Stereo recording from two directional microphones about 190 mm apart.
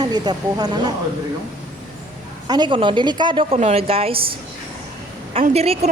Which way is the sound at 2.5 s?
25° right (ahead or behind).